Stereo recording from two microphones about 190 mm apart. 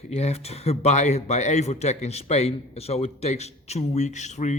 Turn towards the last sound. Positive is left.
turn(degrees=35)  # may be behind; listen again after turning